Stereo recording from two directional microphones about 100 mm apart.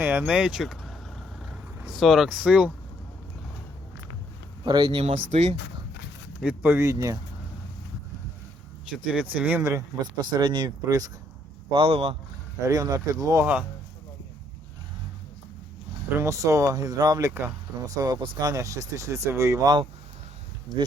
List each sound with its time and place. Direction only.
0.0 s speech: 20° right (ahead or behind); by 0.9 s centre (ahead or behind)
1.4 s vehicle: 5° right (ahead or behind)
4.6 s speech: 50° right (ahead or behind)
4.9 s speech: 90° right
6.4 s speech: 15° right (ahead or behind)
6.7 s speech: 35° right (ahead or behind)
9.0 s speech: 10° right (ahead or behind)
10.3 s speech: 45° right (ahead or behind)
11.7 s speech: 70° right (ahead or behind)
12.6 s speech: 35° right (ahead or behind)
13.4 s speech: 15° right (ahead or behind)
16.0 s speech: 25° right (ahead or behind)